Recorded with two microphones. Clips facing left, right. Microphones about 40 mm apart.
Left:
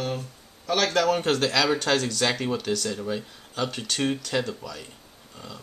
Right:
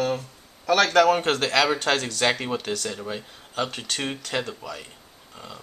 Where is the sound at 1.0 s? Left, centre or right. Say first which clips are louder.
Right 2 dB; right.